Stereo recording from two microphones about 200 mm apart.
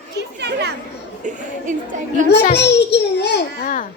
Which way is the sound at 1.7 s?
40° right (ahead or behind).